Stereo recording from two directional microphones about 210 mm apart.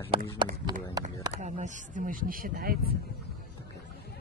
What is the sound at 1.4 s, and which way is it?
Speech, 35° right (ahead or behind).